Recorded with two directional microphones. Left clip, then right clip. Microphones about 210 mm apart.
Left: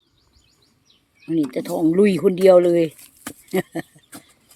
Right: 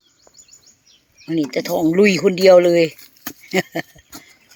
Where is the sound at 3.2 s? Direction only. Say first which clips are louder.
Right 2 dB; 55° left (ahead or behind).